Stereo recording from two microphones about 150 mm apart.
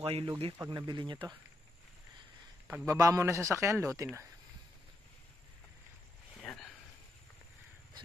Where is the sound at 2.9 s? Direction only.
20° right (ahead or behind).